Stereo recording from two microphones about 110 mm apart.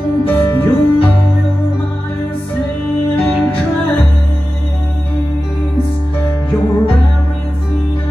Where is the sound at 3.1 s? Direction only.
15° left (ahead or behind).